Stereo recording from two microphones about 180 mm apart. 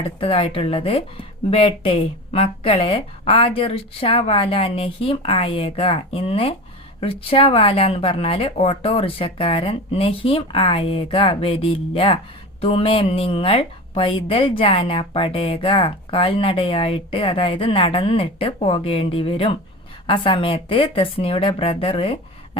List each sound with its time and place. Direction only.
0.2 s speech: 30° left (ahead or behind)